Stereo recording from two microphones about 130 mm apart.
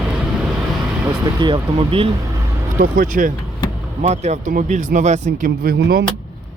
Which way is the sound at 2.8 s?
90° right.